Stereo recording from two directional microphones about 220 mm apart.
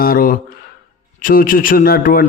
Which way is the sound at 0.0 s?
40° left (ahead or behind).